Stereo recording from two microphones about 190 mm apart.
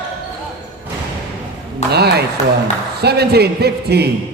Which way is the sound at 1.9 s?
60° right (ahead or behind).